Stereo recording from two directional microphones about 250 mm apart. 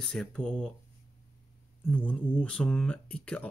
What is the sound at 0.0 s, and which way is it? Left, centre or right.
Speech, centre.